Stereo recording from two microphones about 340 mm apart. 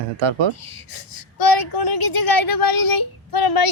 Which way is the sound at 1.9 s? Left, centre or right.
Left.